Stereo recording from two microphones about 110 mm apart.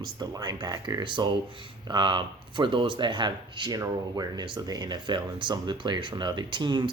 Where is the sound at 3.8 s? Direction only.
30° right (ahead or behind).